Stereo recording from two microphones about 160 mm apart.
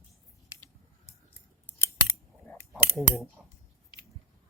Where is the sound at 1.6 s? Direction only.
15° left (ahead or behind).